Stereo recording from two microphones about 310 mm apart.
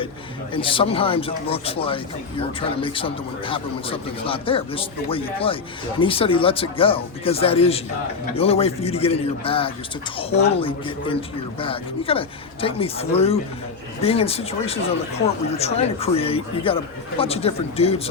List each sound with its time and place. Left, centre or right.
0.5 s a man's voice: centre